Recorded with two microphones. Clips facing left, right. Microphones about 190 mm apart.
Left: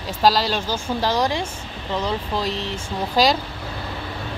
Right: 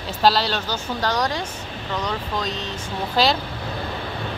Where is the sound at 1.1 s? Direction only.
25° left (ahead or behind).